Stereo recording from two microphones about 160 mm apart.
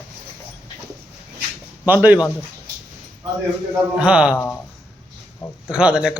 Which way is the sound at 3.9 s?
5° right (ahead or behind).